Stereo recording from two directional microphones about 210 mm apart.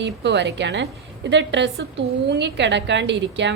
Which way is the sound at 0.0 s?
55° right (ahead or behind).